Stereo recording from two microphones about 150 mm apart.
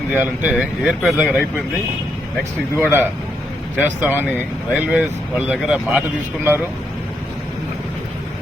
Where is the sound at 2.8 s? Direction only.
15° right (ahead or behind).